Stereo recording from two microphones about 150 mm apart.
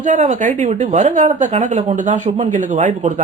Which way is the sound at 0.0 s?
55° right (ahead or behind).